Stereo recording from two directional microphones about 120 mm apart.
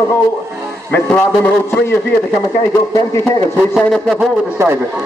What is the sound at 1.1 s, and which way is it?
Speech, 15° left (ahead or behind).